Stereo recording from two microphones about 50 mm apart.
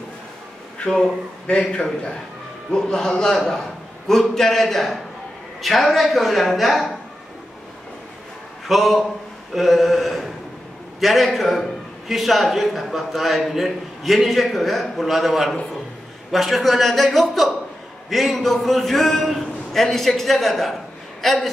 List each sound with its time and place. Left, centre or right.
0.8 s a man's voice: centre
8.6 s a man's voice: centre
9.5 s a sound: centre
11.0 s a man's voice: centre